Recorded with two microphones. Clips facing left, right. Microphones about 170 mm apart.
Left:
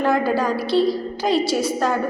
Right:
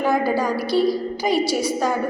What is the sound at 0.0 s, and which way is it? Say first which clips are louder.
Speech: left 1 dB; 5° right (ahead or behind).